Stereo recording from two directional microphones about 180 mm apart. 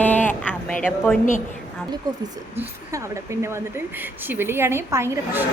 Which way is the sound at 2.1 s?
20° right (ahead or behind).